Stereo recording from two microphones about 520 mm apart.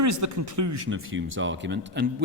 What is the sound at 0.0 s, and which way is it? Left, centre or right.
Speech, right.